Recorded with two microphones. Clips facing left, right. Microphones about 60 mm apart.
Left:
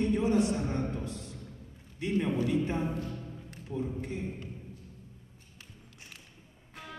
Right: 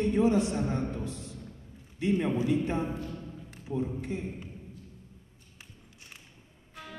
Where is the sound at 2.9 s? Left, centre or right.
Centre.